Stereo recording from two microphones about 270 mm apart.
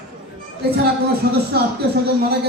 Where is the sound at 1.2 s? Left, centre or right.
Right.